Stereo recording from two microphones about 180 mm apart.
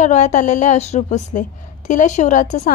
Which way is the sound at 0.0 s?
40° left (ahead or behind).